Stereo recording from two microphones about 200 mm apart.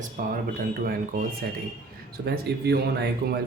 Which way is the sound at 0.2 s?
45° right (ahead or behind).